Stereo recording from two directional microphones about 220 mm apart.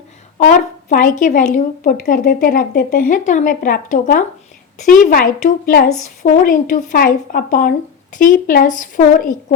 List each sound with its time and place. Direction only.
0.3 s a woman's voice: 35° left (ahead or behind)